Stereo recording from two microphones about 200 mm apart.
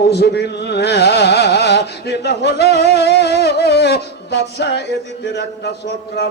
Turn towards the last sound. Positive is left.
turn(degrees=55)  # may be behind; listen again after turning